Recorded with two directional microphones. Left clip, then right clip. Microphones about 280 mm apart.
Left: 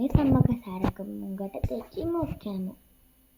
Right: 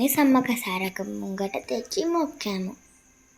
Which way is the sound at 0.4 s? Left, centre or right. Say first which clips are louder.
Right 4 dB; right.